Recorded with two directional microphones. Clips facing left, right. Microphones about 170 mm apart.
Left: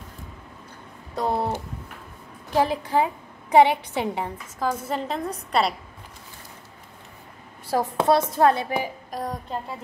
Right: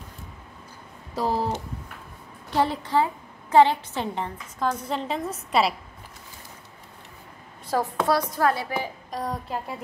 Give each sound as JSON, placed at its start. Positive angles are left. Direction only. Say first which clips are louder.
{"t": 1.1, "sound": "speech", "louder": "even", "side_deg": -5}
{"t": 2.5, "sound": "a woman's voice", "louder": "left 1 dB", "side_deg": 10}
{"t": 8.0, "sound": "a woman's voice", "louder": "left 5 dB", "side_deg": 25}
{"t": 9.1, "sound": "speech", "louder": "right 2 dB", "side_deg": 0}